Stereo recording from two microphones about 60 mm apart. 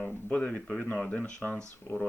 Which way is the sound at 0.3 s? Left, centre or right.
Centre.